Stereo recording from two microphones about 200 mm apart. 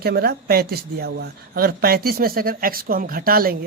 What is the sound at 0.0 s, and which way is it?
Speech, 50° right (ahead or behind).